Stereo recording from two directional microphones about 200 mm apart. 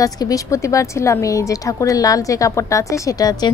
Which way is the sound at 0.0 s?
15° left (ahead or behind).